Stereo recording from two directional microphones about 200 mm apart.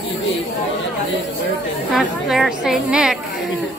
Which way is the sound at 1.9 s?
Centre (ahead or behind).